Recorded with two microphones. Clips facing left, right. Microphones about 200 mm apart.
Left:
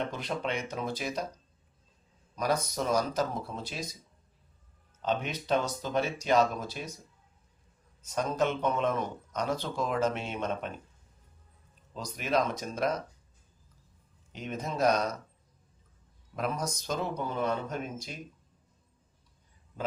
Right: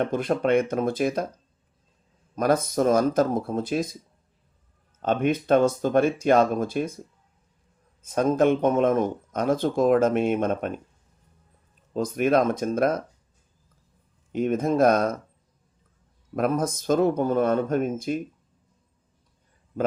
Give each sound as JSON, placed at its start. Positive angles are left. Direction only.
{"t": 0.0, "sound": "speech", "side_deg": -50}
{"t": 2.3, "sound": "speech", "side_deg": -50}
{"t": 5.0, "sound": "speech", "side_deg": -50}
{"t": 8.1, "sound": "speech", "side_deg": -50}
{"t": 11.9, "sound": "speech", "side_deg": -50}
{"t": 14.3, "sound": "speech", "side_deg": -50}
{"t": 16.3, "sound": "speech", "side_deg": -50}